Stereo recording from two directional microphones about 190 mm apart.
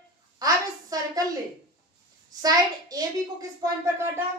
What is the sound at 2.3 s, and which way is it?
A child's voice, 20° right (ahead or behind).